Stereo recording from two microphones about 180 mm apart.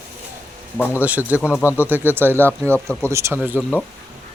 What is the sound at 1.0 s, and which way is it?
Speech, 10° right (ahead or behind).